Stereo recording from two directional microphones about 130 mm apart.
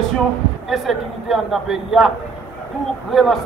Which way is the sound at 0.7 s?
Centre (ahead or behind).